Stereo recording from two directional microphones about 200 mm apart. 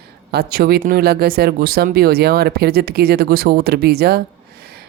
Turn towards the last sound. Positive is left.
turn(degrees=-55)  # may be behind; listen again after turning